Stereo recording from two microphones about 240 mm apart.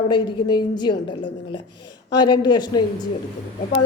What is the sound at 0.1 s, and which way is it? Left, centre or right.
A woman's voice, centre.